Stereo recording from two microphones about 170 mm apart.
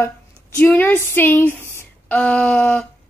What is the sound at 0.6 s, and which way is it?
A woman's voice, 10° left (ahead or behind).